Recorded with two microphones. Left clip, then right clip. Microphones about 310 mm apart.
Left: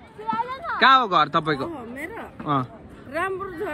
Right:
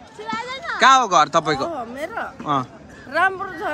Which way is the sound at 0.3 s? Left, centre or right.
Left.